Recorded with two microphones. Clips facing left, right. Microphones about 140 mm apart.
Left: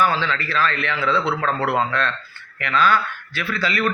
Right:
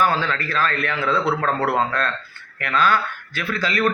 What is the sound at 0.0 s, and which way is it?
A man's voice, 45° right (ahead or behind).